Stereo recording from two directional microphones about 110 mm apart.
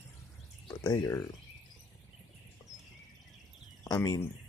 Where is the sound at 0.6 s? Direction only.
45° left (ahead or behind).